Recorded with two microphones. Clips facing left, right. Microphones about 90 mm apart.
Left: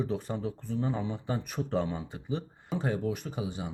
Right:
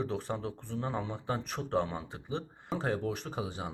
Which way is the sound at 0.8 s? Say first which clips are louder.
Left 3 dB; 50° right (ahead or behind).